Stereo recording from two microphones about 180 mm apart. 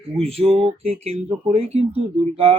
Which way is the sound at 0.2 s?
35° right (ahead or behind).